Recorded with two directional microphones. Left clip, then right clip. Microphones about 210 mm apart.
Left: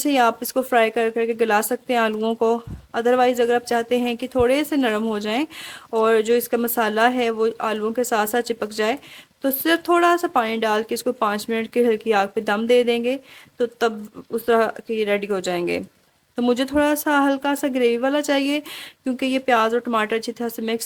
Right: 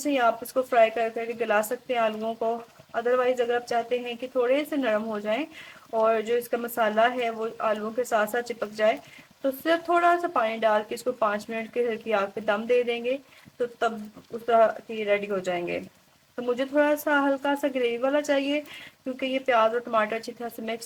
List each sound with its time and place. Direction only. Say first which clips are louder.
0.0 s speech: left 5 dB; 50° left (ahead or behind)